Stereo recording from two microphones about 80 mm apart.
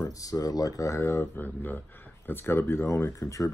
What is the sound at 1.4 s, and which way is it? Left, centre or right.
Speech, left.